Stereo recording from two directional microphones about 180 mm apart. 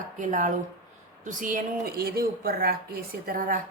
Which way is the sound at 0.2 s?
45° right (ahead or behind).